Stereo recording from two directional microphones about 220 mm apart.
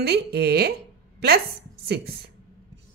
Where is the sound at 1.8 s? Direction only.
50° right (ahead or behind).